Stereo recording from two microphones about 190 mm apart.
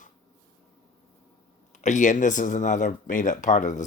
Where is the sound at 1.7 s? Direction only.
40° left (ahead or behind).